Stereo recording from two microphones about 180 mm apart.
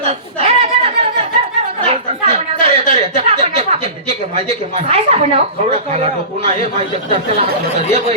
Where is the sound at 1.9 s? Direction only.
35° right (ahead or behind).